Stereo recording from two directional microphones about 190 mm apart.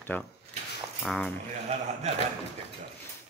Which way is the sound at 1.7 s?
35° right (ahead or behind).